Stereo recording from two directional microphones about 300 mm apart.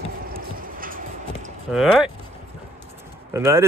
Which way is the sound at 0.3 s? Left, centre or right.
Right.